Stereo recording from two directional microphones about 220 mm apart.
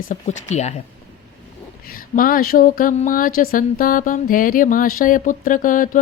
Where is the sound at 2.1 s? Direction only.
40° left (ahead or behind).